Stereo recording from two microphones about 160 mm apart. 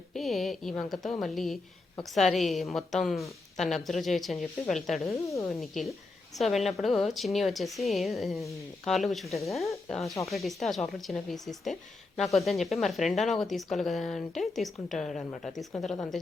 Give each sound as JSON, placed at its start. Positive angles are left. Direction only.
{"t": 0.1, "sound": "speech", "side_deg": 0}
{"t": 5.0, "sound": "speech", "side_deg": 20}
{"t": 5.5, "sound": "speech", "side_deg": 0}